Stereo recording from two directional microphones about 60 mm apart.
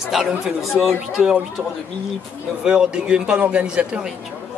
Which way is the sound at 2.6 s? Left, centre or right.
Centre.